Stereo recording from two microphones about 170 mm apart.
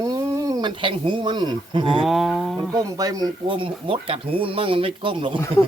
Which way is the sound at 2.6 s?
20° right (ahead or behind).